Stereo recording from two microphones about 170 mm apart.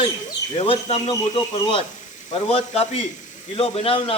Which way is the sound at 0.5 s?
35° left (ahead or behind).